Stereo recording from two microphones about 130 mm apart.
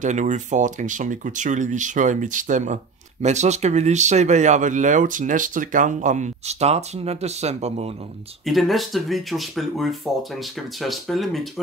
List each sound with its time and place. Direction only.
0.0 s speech: 70° right (ahead or behind)
8.5 s speech: centre (ahead or behind)